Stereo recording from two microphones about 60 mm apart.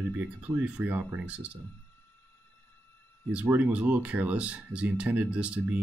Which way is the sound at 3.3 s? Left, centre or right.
Right.